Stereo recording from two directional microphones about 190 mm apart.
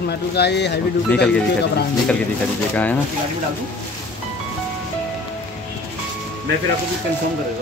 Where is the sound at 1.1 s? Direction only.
5° left (ahead or behind).